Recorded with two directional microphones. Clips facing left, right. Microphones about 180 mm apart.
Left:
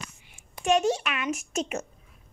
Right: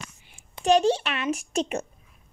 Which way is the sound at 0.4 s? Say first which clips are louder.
Right 3 dB; 35° right (ahead or behind).